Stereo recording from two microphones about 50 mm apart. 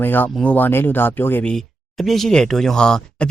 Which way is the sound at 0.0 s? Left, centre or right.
Left.